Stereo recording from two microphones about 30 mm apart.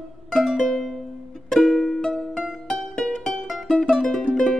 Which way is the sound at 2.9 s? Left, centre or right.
Centre.